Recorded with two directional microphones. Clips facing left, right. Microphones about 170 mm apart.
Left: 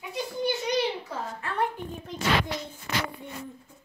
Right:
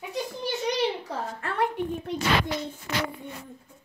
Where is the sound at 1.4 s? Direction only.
70° right (ahead or behind).